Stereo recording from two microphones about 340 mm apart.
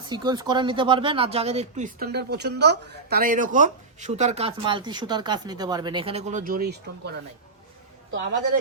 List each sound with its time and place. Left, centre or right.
0.0 s speech: centre; by 7.1 s right